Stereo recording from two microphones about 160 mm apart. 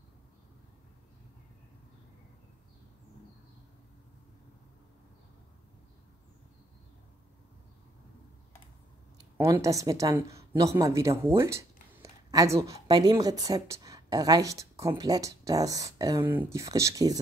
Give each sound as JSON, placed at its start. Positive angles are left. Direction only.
{"t": 9.4, "sound": "a woman's voice", "side_deg": -20}